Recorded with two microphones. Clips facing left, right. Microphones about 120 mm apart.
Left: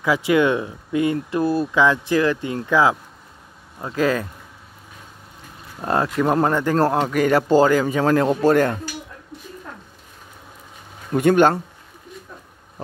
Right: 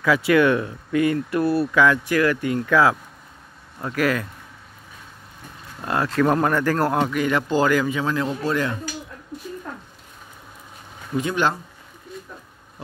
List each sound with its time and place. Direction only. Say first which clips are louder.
0.0 s speech: even; 15° left (ahead or behind)
5.8 s speech: left 1 dB; 30° left (ahead or behind)
7.1 s speech: left 5 dB; 40° left (ahead or behind)
8.0 s a man's voice: left 7 dB; 50° left (ahead or behind)
11.1 s speech: left 7 dB; 55° left (ahead or behind)